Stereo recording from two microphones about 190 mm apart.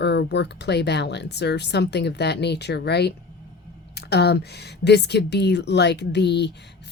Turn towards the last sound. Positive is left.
turn(degrees=60)  # may be behind; listen again after turning